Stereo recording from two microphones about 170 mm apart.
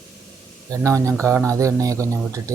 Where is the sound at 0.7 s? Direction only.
20° right (ahead or behind).